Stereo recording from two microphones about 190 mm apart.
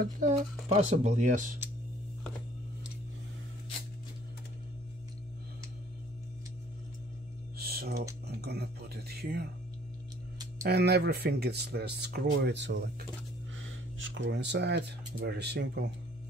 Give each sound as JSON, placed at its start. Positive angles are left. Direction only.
{"t": 0.0, "sound": "speech", "side_deg": -40}
{"t": 7.5, "sound": "music", "side_deg": -55}
{"t": 8.4, "sound": "speech", "side_deg": -55}
{"t": 10.6, "sound": "speech", "side_deg": -55}
{"t": 13.6, "sound": "speech", "side_deg": -85}